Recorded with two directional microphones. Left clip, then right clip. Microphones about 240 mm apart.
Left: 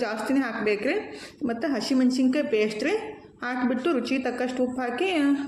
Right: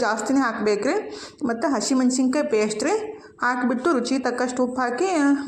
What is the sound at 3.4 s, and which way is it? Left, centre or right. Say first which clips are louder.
Speech: right 5 dB; centre.